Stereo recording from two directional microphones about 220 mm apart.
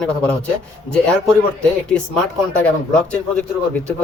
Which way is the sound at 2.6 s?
5° left (ahead or behind).